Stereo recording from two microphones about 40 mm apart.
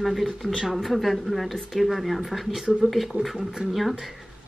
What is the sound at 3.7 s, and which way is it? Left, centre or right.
Speech, centre.